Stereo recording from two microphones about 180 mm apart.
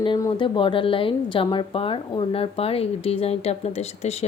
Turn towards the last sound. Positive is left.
turn(degrees=35)  # may be behind; listen again after turning